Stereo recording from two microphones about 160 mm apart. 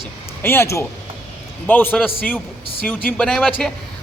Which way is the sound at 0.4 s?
15° left (ahead or behind).